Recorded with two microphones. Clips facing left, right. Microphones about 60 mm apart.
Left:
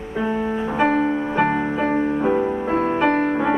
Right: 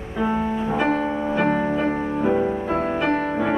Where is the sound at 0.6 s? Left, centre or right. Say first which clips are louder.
Left 5 dB; centre.